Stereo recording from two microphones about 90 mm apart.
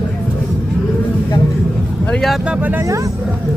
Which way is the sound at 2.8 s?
35° right (ahead or behind).